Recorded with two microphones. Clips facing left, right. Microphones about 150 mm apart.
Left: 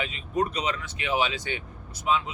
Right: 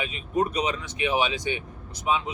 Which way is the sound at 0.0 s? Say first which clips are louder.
Right 2 dB; 15° right (ahead or behind).